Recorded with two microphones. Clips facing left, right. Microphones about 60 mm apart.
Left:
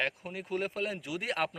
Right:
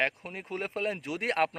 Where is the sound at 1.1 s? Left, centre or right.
Right.